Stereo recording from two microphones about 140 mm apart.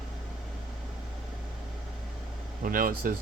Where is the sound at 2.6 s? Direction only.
80° right.